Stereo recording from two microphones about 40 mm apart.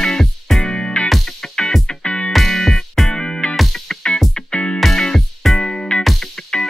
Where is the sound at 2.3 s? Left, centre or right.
Centre.